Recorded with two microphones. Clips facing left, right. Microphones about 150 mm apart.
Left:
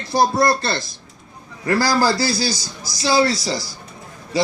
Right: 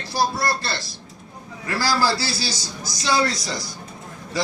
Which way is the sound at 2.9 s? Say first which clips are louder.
Left 5 dB; 35° left (ahead or behind).